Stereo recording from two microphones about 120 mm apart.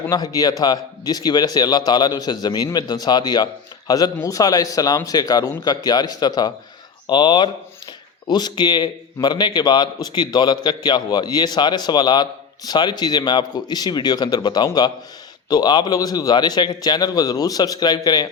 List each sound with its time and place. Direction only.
0.1 s a man's voice: 30° left (ahead or behind)